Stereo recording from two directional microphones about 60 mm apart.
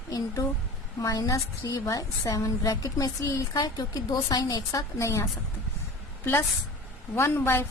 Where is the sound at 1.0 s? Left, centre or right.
Left.